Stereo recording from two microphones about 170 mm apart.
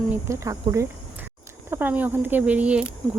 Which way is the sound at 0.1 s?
15° right (ahead or behind).